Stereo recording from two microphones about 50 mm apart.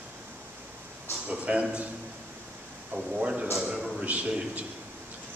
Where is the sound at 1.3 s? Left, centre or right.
Right.